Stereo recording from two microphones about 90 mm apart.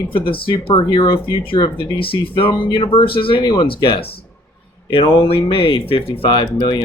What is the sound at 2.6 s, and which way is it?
Speech, 60° left (ahead or behind).